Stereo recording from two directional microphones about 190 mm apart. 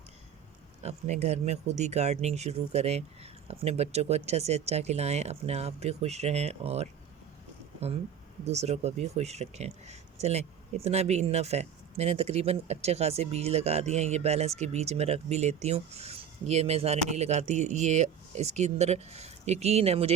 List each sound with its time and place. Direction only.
0.8 s speech: 35° right (ahead or behind)
8.4 s speech: 35° right (ahead or behind)